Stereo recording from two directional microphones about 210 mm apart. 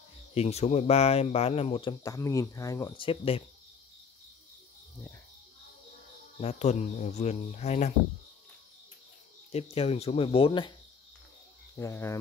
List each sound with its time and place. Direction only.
0.3 s speech: 30° left (ahead or behind)
6.4 s speech: 35° left (ahead or behind)
9.5 s speech: 30° left (ahead or behind)
11.7 s speech: 15° left (ahead or behind)